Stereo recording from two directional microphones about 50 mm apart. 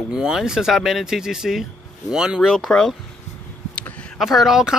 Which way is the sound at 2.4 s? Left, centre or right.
Centre.